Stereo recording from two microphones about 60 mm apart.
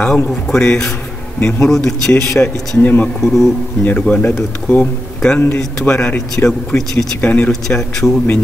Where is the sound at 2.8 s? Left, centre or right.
Left.